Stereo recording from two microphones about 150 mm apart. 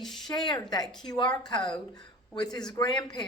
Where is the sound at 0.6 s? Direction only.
25° left (ahead or behind).